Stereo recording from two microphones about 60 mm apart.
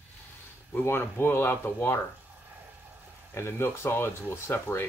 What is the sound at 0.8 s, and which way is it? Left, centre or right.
Speech, left.